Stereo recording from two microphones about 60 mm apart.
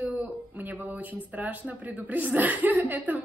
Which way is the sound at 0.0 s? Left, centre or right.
Right.